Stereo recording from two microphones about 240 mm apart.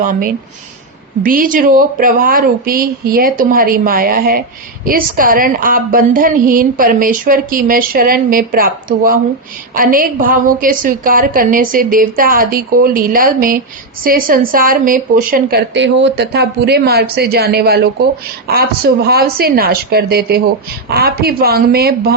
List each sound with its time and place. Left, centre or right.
0.0 s a woman's voice: right
9.7 s a woman's voice: right